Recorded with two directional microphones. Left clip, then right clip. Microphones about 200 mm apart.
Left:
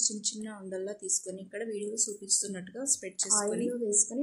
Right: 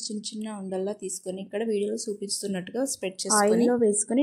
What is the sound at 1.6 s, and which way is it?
Speech, 25° right (ahead or behind).